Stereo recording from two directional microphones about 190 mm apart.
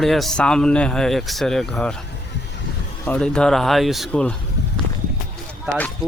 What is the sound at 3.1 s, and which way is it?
Speech, 5° left (ahead or behind).